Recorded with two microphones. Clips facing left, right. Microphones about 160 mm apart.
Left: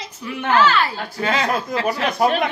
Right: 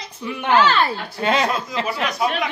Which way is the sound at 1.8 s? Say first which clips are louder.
Left 3 dB; 55° left (ahead or behind).